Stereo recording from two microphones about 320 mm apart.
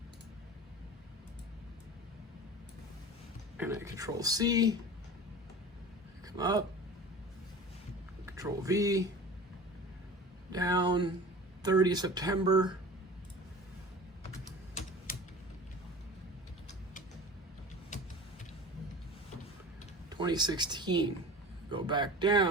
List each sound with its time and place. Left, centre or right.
3.6 s speech: centre
6.2 s speech: centre
8.3 s a man's voice: centre
10.5 s speech: centre
20.1 s speech: centre